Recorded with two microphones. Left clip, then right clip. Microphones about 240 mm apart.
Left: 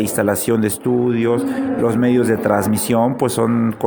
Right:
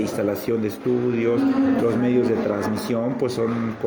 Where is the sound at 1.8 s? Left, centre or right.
Left.